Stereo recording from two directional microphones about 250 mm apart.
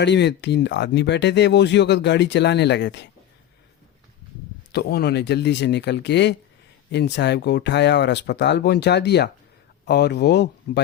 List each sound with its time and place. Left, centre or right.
0.0 s speech: left
4.7 s speech: left